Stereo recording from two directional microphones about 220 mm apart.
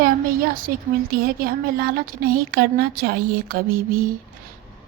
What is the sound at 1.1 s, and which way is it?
Speech, 40° right (ahead or behind).